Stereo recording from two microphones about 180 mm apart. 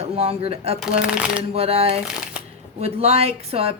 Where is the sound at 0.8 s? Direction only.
5° right (ahead or behind).